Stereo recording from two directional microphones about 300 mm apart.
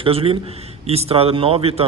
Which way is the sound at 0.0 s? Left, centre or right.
Centre.